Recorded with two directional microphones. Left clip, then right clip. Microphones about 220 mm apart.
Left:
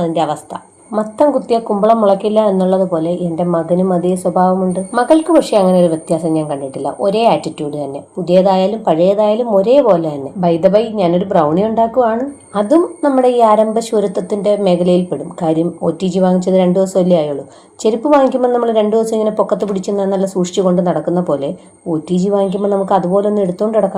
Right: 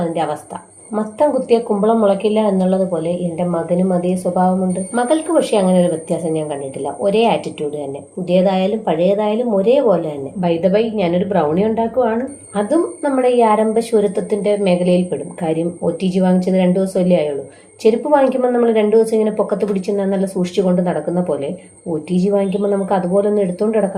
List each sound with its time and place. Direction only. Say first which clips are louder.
0.0 s a woman's voice: left 4 dB; 30° left (ahead or behind)
1.5 s a woman's voice: left 3 dB; 25° left (ahead or behind)
12.5 s a woman's voice: left 4 dB; 30° left (ahead or behind)